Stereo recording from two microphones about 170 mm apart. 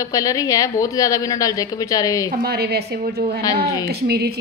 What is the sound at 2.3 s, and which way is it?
A woman's voice, 65° right (ahead or behind).